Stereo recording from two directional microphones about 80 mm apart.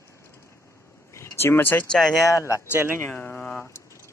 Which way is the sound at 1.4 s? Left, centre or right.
Left.